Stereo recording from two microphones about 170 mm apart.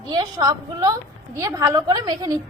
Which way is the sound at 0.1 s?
25° right (ahead or behind).